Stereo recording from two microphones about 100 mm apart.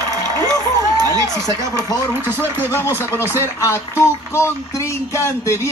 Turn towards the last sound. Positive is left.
turn(degrees=25)  # may be behind; listen again after turning